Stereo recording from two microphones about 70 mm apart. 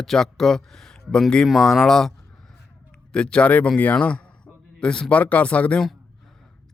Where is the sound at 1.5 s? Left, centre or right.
Centre.